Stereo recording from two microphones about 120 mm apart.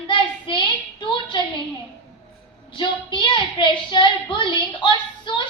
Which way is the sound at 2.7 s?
40° left (ahead or behind).